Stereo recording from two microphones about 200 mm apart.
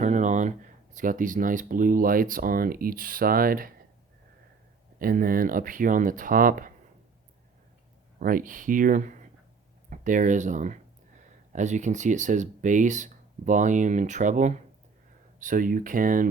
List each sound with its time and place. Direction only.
0.0 s speech: 35° right (ahead or behind)
4.9 s speech: 45° right (ahead or behind)
8.2 s speech: 45° right (ahead or behind)